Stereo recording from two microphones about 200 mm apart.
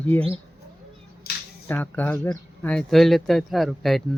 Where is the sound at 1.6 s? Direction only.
10° left (ahead or behind).